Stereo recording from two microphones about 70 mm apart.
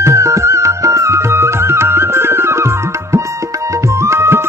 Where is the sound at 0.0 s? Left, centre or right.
Right.